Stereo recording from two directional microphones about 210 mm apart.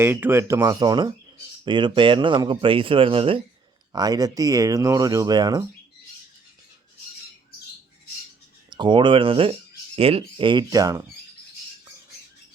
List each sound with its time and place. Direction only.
0.0 s speech: 10° right (ahead or behind)
8.7 s speech: 20° right (ahead or behind)